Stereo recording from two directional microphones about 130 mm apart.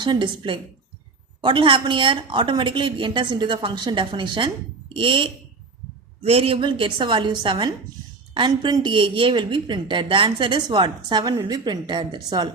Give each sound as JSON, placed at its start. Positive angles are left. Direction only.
{"t": 0.0, "sound": "a woman's voice", "side_deg": -35}